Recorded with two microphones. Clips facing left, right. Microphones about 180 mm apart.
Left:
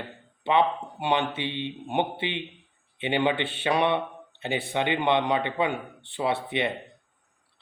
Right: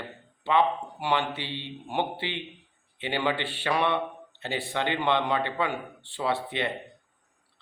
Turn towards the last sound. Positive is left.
turn(degrees=15)  # may be behind; listen again after turning